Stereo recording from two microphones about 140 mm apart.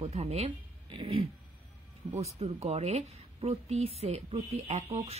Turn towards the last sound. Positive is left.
turn(degrees=-45)  # may be behind; listen again after turning